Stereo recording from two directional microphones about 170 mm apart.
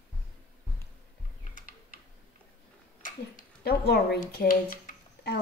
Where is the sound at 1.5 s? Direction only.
50° left (ahead or behind).